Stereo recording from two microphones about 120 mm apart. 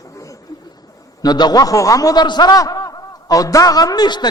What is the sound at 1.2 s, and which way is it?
A man's voice, 35° left (ahead or behind).